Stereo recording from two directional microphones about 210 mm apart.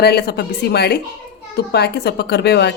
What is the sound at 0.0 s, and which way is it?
A woman's voice, 50° left (ahead or behind).